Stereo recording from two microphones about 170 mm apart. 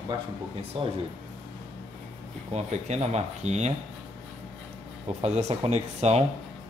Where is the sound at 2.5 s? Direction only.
40° right (ahead or behind).